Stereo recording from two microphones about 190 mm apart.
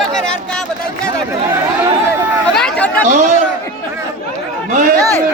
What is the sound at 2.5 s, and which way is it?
Speech, 5° left (ahead or behind).